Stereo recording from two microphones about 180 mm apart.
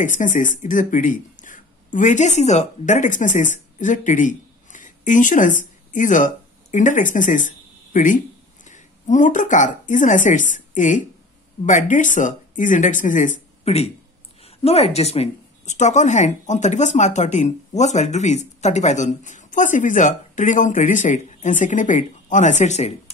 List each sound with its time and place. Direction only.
0.0 s speech: 45° left (ahead or behind)